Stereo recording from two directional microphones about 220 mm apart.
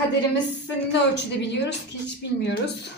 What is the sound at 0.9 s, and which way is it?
A woman's voice, 50° left (ahead or behind).